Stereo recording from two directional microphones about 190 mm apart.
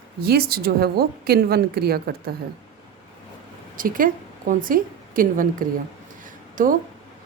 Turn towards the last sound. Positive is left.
turn(degrees=-45)  # may be behind; listen again after turning